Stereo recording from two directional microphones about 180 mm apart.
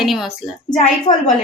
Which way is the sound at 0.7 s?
45° left (ahead or behind).